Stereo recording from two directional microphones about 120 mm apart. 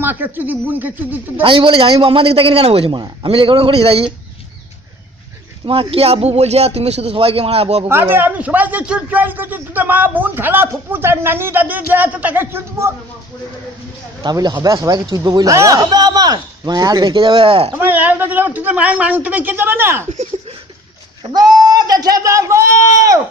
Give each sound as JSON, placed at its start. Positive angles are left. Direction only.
{"t": 0.0, "sound": "a man's voice", "side_deg": -15}
{"t": 1.4, "sound": "speech", "side_deg": -45}
{"t": 5.7, "sound": "a man's voice", "side_deg": -50}
{"t": 7.9, "sound": "a man's voice", "side_deg": -20}
{"t": 14.2, "sound": "speech", "side_deg": -35}
{"t": 17.7, "sound": "a man's voice", "side_deg": -15}
{"t": 21.2, "sound": "speech", "side_deg": -35}